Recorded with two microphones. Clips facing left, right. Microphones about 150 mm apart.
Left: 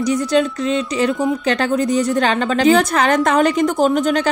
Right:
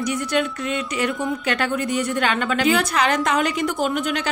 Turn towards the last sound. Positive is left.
turn(degrees=40)  # may be behind; listen again after turning